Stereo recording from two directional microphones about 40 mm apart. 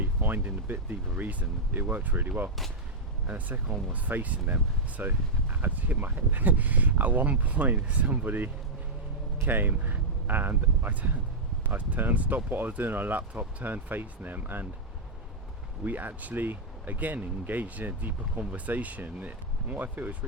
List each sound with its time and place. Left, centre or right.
0.0 s a sound: right
0.4 s speech: right
15.8 s speech: right